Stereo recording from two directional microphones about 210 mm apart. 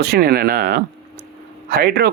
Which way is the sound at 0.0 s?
50° right (ahead or behind).